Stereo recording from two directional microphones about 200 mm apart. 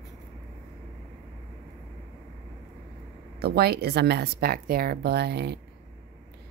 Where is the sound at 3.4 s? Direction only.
55° right (ahead or behind).